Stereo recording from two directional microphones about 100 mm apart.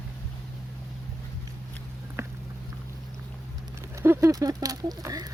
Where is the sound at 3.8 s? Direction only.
25° right (ahead or behind).